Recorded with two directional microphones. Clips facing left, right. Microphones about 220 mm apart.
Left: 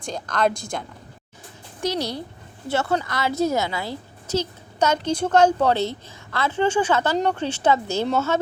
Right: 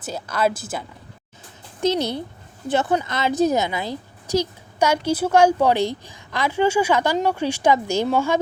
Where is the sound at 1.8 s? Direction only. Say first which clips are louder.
Right 4 dB; 20° right (ahead or behind).